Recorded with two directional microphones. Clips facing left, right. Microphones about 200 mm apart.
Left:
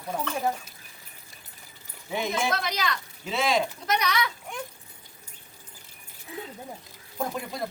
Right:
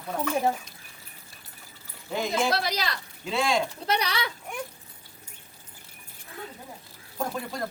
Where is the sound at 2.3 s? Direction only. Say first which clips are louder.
Right 3 dB; 35° right (ahead or behind).